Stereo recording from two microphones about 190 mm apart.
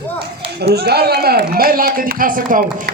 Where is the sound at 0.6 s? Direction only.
60° right (ahead or behind).